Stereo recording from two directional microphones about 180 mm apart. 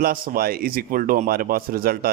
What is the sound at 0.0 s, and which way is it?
Speech, 55° right (ahead or behind).